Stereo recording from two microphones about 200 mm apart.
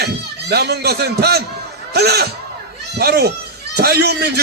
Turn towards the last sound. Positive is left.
turn(degrees=-55)  # may be behind; listen again after turning